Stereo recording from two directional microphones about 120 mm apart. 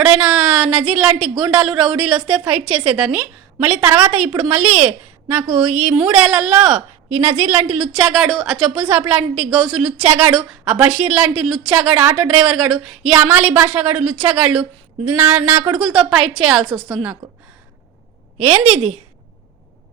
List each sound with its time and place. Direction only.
0.0 s a sound: 10° right (ahead or behind)
1.4 s a woman's voice: 5° right (ahead or behind)
7.8 s a woman's voice: 5° right (ahead or behind)
15.8 s a woman's voice: centre (ahead or behind)
18.7 s a woman's voice: 55° right (ahead or behind)